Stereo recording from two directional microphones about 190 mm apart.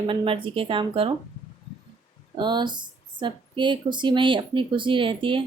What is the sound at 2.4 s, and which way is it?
A woman's voice, 25° right (ahead or behind).